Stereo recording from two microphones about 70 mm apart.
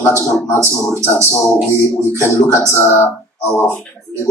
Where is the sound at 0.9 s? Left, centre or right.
Left.